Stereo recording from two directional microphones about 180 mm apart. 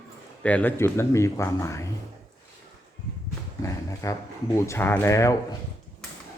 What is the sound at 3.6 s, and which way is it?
Dog, 15° left (ahead or behind).